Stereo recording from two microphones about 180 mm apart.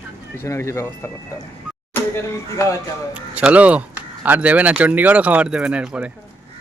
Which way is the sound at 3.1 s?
5° right (ahead or behind).